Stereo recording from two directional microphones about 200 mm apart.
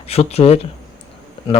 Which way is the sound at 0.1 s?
30° left (ahead or behind).